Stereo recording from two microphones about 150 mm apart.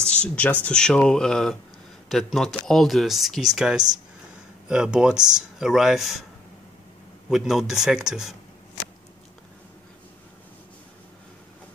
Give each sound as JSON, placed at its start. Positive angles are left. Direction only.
{"t": 0.0, "sound": "speech", "side_deg": 10}
{"t": 7.2, "sound": "speech", "side_deg": 0}